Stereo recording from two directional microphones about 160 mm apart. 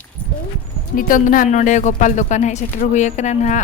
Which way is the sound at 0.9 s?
60° left (ahead or behind).